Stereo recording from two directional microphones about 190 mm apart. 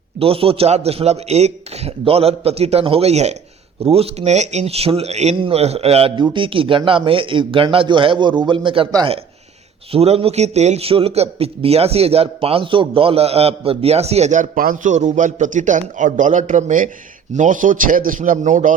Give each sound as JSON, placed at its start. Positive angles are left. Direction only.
{"t": 0.2, "sound": "a man's voice", "side_deg": -30}